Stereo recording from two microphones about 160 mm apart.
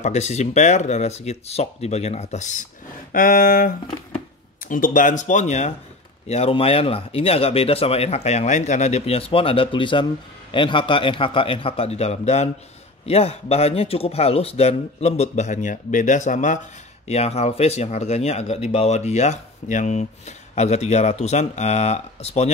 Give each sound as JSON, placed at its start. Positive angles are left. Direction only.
{"t": 0.0, "sound": "speech", "side_deg": 45}
{"t": 3.1, "sound": "speech", "side_deg": 60}
{"t": 17.1, "sound": "speech", "side_deg": 40}